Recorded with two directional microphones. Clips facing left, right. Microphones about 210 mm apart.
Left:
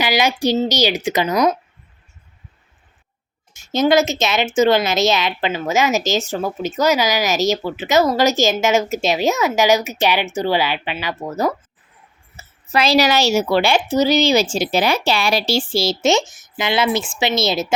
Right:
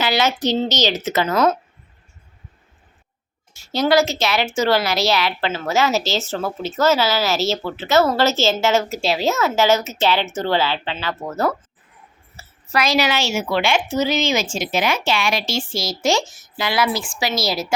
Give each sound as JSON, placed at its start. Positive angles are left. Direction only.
{"t": 0.0, "sound": "a woman's voice", "side_deg": 15}
{"t": 3.5, "sound": "a woman's voice", "side_deg": 20}
{"t": 12.4, "sound": "a woman's voice", "side_deg": 25}